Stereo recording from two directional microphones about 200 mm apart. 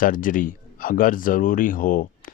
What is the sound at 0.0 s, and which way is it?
Speech, 45° left (ahead or behind).